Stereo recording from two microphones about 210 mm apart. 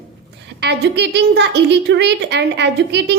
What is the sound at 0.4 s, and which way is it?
A woman's voice, 55° right (ahead or behind).